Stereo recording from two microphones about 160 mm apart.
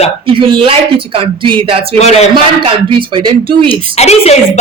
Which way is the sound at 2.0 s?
45° left (ahead or behind).